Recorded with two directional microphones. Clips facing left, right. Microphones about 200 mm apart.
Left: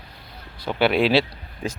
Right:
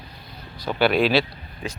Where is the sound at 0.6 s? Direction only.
20° left (ahead or behind).